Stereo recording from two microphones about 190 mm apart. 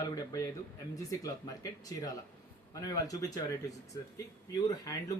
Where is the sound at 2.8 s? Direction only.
20° left (ahead or behind).